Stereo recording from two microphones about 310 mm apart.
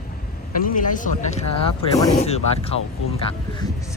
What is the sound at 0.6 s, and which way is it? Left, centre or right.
Speech, left.